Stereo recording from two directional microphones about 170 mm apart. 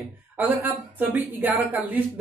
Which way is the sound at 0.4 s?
10° right (ahead or behind).